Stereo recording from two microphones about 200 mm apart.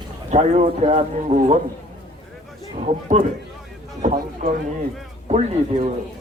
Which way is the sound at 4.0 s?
40° right (ahead or behind).